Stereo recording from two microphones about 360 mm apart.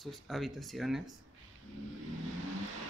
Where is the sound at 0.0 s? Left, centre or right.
Centre.